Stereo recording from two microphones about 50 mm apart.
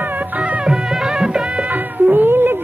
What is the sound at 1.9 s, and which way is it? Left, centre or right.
Cat, right.